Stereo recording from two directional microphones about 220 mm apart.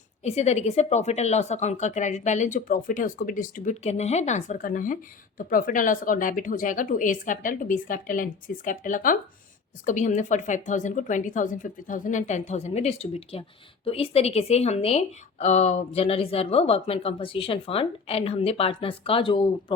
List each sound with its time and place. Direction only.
0.3 s speech: 30° left (ahead or behind)